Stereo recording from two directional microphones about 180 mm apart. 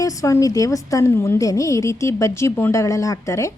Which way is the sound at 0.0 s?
20° left (ahead or behind).